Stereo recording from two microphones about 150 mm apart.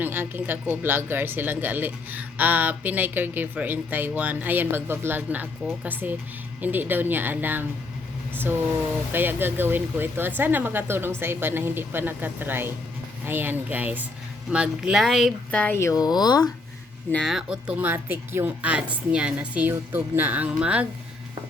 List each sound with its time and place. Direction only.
0.0 s speech: 15° right (ahead or behind)
9.1 s speech: 15° right (ahead or behind)
15.5 s speech: 10° left (ahead or behind)
17.1 s speech: 10° left (ahead or behind)
17.3 s speech: 5° right (ahead or behind)